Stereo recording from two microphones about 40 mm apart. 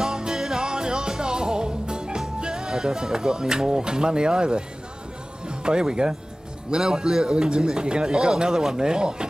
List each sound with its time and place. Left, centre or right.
0.0 s music: centre
5.5 s a man's voice: right